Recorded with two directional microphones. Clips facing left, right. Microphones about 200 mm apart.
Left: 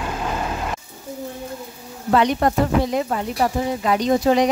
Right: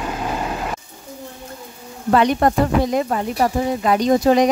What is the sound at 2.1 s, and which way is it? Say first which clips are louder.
Speech: right 2 dB; 50° right (ahead or behind).